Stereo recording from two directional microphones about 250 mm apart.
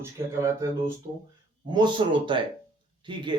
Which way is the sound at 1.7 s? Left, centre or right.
Centre.